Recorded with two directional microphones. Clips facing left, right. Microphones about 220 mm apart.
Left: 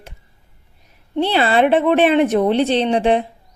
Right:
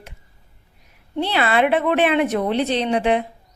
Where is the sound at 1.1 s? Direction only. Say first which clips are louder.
Left 4 dB; 30° left (ahead or behind).